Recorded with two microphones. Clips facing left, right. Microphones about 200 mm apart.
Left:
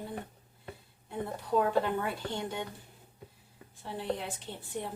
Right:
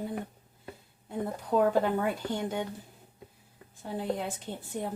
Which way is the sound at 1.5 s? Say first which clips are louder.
Right 3 dB; 45° right (ahead or behind).